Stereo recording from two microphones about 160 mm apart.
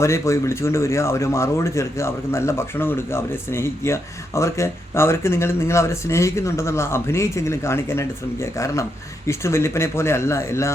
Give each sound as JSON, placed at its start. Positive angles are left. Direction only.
{"t": 0.0, "sound": "speech", "side_deg": 20}